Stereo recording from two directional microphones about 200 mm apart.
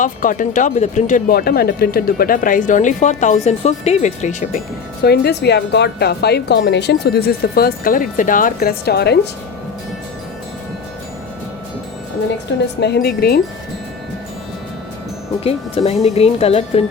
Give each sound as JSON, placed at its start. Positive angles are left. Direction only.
{"t": 0.0, "sound": "speech", "side_deg": 40}
{"t": 5.0, "sound": "a woman's voice", "side_deg": 55}
{"t": 12.8, "sound": "a woman's voice", "side_deg": 55}
{"t": 15.4, "sound": "speech", "side_deg": 30}